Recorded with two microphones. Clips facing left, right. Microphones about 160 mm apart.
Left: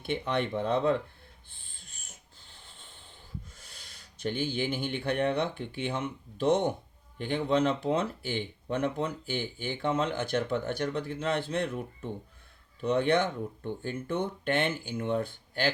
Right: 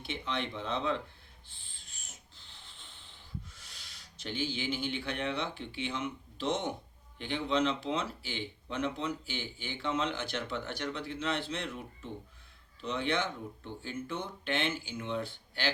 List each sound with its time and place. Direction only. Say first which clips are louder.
0.0 s speech: left 6 dB; 55° left (ahead or behind)
2.0 s snort: left 1 dB; 50° left (ahead or behind)
7.2 s speech: left 4 dB; 50° left (ahead or behind)
12.8 s speech: left 7 dB; 55° left (ahead or behind)